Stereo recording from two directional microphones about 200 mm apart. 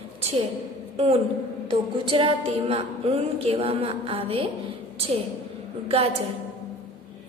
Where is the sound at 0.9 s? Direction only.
30° right (ahead or behind).